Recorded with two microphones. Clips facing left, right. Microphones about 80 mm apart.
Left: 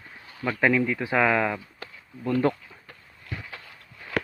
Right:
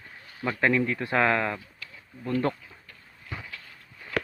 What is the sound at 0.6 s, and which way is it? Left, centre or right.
Speech, centre.